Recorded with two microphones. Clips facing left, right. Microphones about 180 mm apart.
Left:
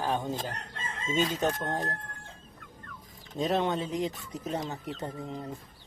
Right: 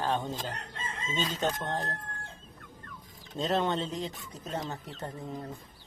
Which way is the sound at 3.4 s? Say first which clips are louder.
Left 1 dB; 15° left (ahead or behind).